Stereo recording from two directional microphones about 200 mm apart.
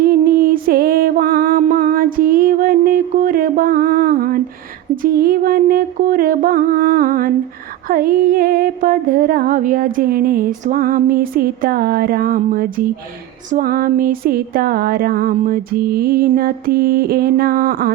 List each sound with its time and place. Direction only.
0.0 s music: 45° right (ahead or behind)
1.5 s music: 35° right (ahead or behind)
1.8 s music: 45° right (ahead or behind)